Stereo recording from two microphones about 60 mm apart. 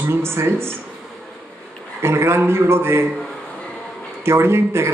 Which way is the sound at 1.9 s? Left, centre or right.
Right.